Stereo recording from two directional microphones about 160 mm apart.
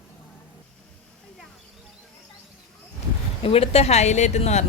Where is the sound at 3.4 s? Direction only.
40° left (ahead or behind).